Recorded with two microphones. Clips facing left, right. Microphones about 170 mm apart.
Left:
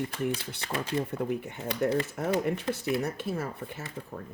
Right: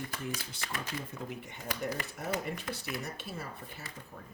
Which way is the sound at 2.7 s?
25° left (ahead or behind).